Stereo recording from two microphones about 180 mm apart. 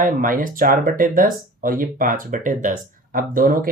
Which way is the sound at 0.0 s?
50° right (ahead or behind).